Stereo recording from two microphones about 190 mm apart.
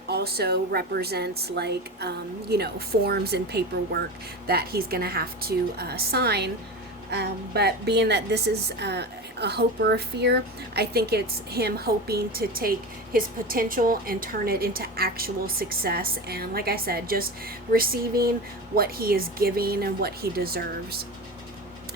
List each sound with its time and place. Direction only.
0.1 s a woman's voice: 55° right (ahead or behind)